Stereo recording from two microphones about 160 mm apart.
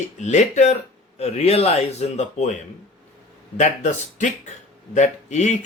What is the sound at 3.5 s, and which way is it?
Speech, 45° left (ahead or behind).